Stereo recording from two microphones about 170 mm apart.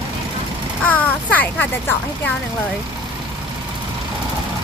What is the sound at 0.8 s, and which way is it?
A child's voice, 10° left (ahead or behind).